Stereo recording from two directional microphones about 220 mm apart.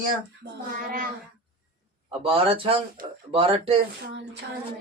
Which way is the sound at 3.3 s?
25° right (ahead or behind).